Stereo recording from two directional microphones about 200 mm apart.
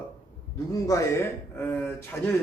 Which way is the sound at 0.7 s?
15° left (ahead or behind).